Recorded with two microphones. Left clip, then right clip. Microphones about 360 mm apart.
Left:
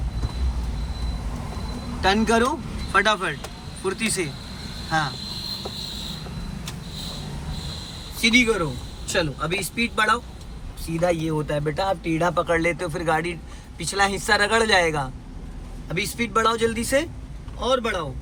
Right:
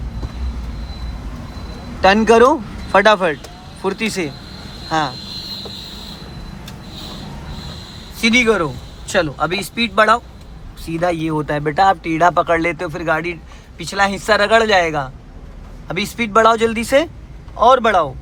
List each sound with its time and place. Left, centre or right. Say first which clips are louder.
2.0 s a man's voice: right 10 dB; centre
8.2 s a man's voice: right 5 dB; centre